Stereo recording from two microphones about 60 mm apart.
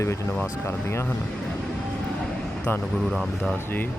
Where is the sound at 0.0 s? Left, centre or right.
Left.